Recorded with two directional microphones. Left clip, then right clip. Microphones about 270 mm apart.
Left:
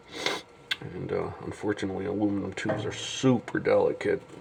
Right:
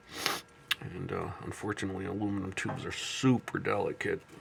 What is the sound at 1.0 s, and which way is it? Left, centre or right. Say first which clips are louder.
Speech: left 6 dB; right.